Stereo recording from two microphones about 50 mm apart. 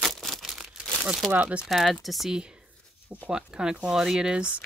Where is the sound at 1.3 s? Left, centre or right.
Right.